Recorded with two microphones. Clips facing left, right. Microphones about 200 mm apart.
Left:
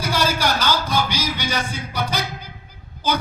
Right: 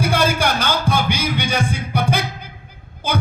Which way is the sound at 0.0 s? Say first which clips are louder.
Right 3 dB; 55° right (ahead or behind).